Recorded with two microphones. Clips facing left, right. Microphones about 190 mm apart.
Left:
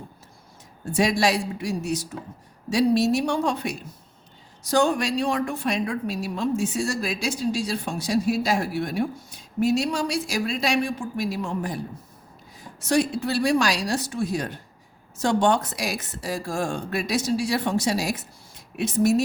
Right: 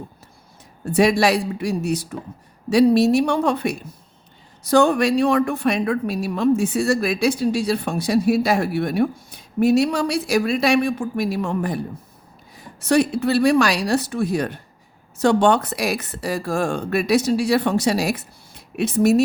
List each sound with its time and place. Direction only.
0.9 s a woman's voice: 60° right (ahead or behind)